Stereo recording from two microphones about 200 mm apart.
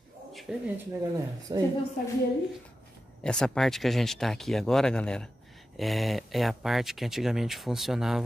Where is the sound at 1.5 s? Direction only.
20° right (ahead or behind).